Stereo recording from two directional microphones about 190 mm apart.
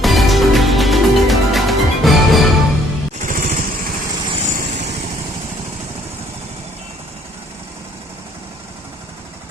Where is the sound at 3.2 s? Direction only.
45° right (ahead or behind).